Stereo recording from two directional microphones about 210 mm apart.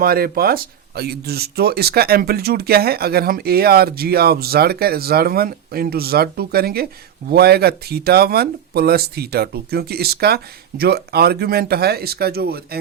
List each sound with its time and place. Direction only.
0.0 s speech: 45° right (ahead or behind)